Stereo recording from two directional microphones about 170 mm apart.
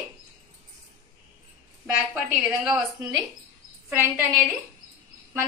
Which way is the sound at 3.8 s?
15° right (ahead or behind).